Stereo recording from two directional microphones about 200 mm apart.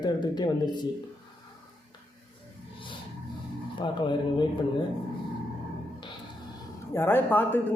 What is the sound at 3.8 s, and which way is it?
Speech, 25° left (ahead or behind).